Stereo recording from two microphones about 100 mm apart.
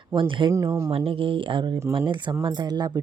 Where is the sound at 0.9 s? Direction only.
70° right (ahead or behind).